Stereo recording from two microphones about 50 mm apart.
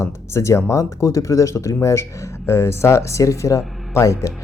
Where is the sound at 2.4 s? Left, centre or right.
Left.